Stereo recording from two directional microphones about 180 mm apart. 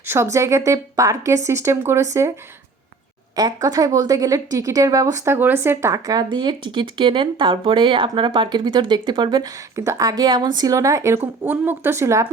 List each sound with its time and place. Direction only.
0.1 s speech: 15° right (ahead or behind)
3.3 s speech: 20° right (ahead or behind)